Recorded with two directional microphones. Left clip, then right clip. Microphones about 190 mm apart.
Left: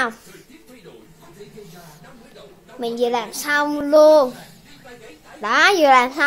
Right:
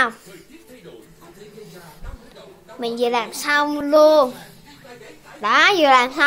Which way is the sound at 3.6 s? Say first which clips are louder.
Left 2 dB; 10° left (ahead or behind).